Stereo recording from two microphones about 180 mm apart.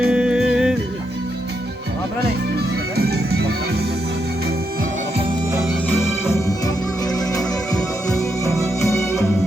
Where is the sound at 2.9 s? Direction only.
65° right (ahead or behind).